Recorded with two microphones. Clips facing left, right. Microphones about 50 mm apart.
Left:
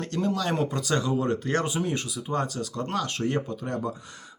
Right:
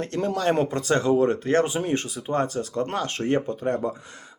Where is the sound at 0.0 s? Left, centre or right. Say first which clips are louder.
Right 3 dB; right.